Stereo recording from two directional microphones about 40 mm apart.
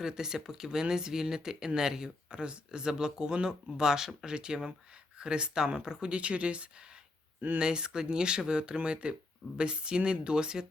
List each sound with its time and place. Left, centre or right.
0.0 s speech: centre; by 6.7 s right
7.6 s speech: right